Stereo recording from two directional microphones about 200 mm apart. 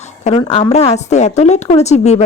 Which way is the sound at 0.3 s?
30° left (ahead or behind).